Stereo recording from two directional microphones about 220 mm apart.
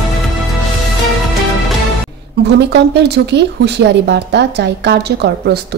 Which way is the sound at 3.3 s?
50° right (ahead or behind).